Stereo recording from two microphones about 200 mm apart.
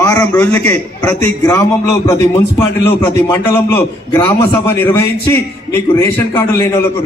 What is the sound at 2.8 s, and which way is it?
A man's voice, 10° left (ahead or behind).